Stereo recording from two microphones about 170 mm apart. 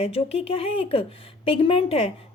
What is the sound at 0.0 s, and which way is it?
A woman's voice, 35° left (ahead or behind).